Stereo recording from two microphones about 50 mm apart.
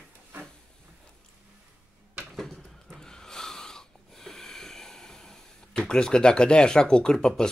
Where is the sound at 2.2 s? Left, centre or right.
Centre.